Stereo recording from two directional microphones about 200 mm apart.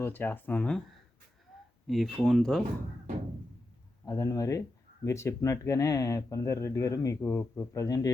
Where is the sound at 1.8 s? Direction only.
Centre (ahead or behind).